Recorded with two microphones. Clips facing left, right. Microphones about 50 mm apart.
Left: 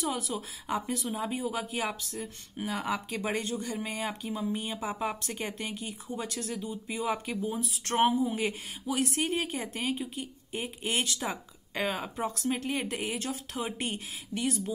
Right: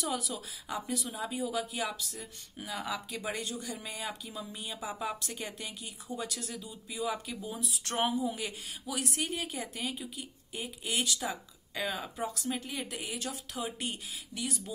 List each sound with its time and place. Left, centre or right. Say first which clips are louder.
0.0 s speech: left 3 dB; left